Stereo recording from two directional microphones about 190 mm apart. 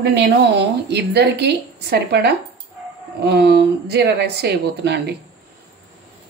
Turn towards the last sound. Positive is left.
turn(degrees=-60)  # may be behind; listen again after turning